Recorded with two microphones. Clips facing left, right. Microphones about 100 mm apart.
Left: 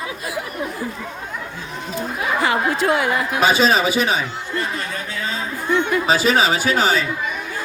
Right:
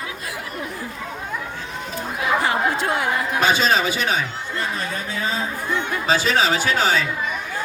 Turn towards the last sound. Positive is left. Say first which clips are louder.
# left 2 dB
turn(degrees=5)  # may be behind; listen again after turning